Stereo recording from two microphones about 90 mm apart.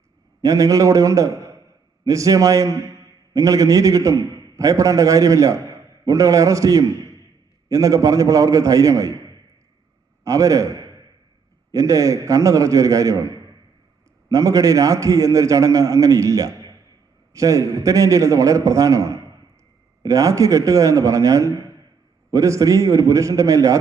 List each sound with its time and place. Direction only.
0.4 s a man's voice: 40° right (ahead or behind)
10.2 s a man's voice: 40° right (ahead or behind)